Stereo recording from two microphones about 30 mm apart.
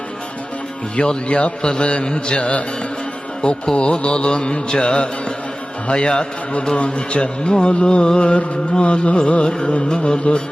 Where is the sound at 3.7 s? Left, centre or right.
Left.